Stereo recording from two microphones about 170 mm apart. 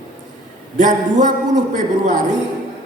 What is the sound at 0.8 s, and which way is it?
A man's voice, 50° right (ahead or behind).